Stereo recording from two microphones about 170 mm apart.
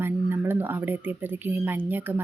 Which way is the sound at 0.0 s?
10° right (ahead or behind).